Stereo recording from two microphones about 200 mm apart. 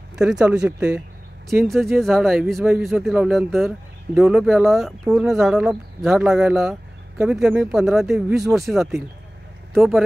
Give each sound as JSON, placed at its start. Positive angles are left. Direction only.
{"t": 0.1, "sound": "a man's voice", "side_deg": -5}